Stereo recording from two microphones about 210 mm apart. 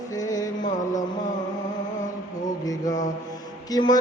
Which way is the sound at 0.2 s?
15° left (ahead or behind).